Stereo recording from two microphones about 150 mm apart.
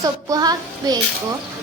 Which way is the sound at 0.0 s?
25° right (ahead or behind).